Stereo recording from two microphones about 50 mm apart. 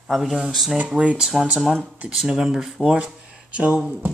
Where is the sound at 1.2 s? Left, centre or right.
Centre.